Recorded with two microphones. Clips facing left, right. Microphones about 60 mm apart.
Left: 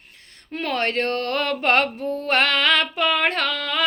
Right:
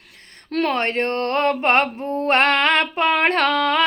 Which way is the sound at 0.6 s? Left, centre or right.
Right.